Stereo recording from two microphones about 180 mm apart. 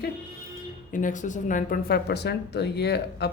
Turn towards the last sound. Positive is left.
turn(degrees=65)  # may be behind; listen again after turning